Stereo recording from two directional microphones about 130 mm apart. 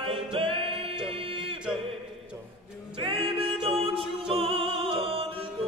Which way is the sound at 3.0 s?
45° right (ahead or behind).